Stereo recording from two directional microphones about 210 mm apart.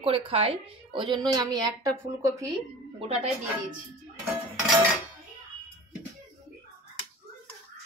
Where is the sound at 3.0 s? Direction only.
30° right (ahead or behind).